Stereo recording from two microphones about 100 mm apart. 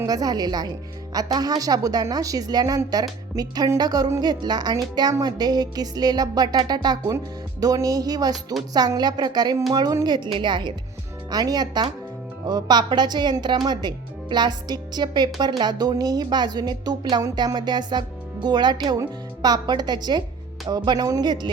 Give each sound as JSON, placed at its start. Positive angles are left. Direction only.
{"t": 0.0, "sound": "a woman's voice", "side_deg": -40}